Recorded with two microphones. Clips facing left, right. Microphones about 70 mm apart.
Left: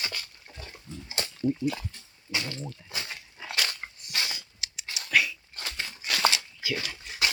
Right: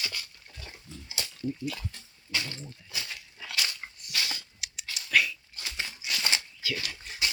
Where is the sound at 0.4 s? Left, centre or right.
Left.